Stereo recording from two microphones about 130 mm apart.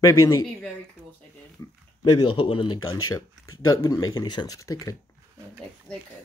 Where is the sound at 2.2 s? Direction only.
40° left (ahead or behind); by 4.9 s 25° left (ahead or behind).